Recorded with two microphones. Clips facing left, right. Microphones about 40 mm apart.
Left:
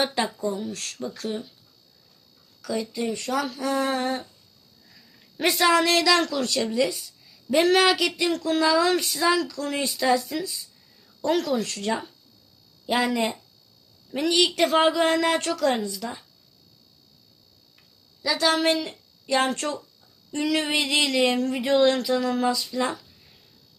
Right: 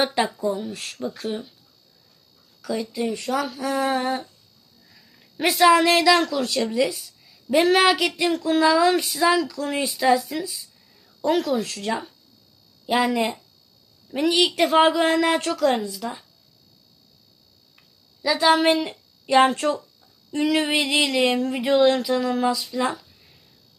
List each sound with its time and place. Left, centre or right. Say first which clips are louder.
0.0 s speech: right 3 dB; centre
2.6 s speech: right 2 dB; centre
17.7 s a sound: right 5 dB; centre
19.5 s speech: right 6 dB; centre